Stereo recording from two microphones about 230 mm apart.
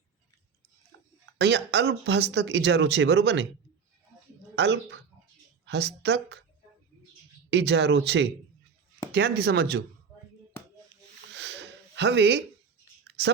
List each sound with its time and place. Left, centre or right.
1.4 s speech: right
4.5 s speech: right
7.5 s speech: right
11.3 s a sound: right
13.1 s whispering: right